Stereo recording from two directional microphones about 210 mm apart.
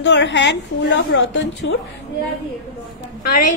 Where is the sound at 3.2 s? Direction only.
40° left (ahead or behind).